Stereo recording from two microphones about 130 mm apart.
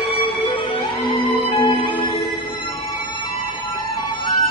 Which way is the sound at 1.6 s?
40° left (ahead or behind).